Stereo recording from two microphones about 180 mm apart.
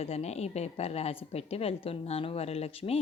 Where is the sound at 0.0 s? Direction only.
35° left (ahead or behind).